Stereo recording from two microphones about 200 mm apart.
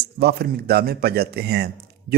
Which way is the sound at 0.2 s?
50° right (ahead or behind).